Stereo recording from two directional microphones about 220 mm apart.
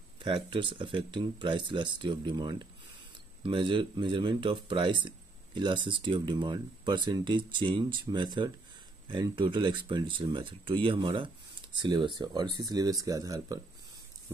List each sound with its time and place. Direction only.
0.2 s speech: 20° right (ahead or behind)